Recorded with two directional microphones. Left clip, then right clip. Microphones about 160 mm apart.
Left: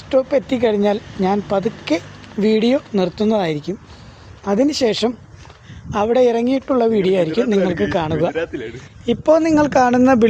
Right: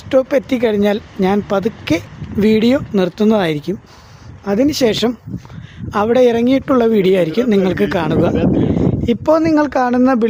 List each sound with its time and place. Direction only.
0.1 s speech: 50° right (ahead or behind)
9.6 s speech: 20° right (ahead or behind)